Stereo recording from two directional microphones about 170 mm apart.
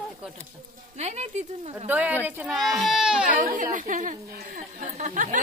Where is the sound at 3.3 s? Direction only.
50° right (ahead or behind).